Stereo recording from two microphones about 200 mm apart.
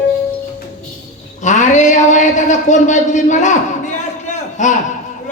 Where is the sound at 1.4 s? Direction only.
35° left (ahead or behind).